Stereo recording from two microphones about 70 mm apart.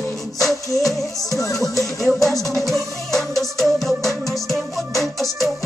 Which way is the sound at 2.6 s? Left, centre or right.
Centre.